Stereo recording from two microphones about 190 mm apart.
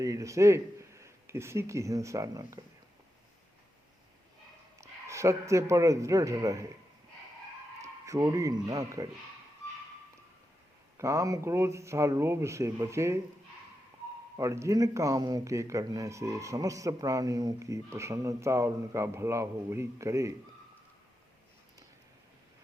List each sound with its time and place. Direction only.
0.0 s a man's voice: 15° right (ahead or behind)
4.8 s a man's voice: 15° right (ahead or behind)
7.8 s speech: 15° right (ahead or behind)
10.9 s speech: 15° right (ahead or behind)
14.3 s speech: 15° right (ahead or behind)